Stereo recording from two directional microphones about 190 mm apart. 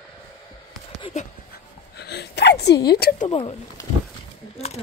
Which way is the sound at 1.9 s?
60° left (ahead or behind).